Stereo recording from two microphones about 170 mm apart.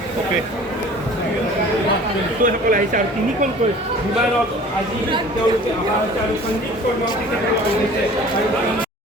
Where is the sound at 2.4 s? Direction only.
50° right (ahead or behind).